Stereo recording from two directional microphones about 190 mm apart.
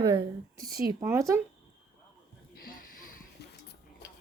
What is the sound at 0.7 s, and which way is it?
Speech, 50° right (ahead or behind).